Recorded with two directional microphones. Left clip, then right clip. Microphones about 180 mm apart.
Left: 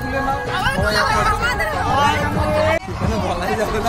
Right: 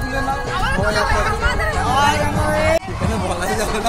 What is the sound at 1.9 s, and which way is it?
Speech, 55° right (ahead or behind).